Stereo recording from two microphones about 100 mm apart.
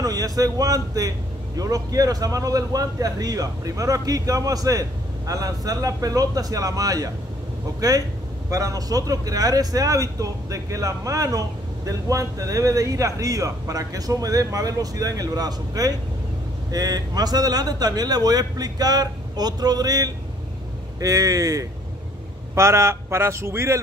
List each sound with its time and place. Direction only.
0.0 s a man's voice: 35° right (ahead or behind)